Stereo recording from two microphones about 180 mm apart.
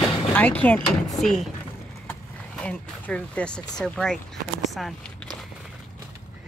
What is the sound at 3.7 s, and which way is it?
Speech, 5° left (ahead or behind).